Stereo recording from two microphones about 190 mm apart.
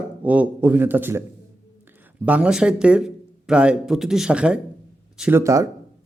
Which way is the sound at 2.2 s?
5° right (ahead or behind).